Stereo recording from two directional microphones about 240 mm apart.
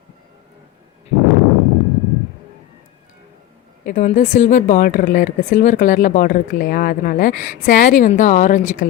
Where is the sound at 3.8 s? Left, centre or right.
Left.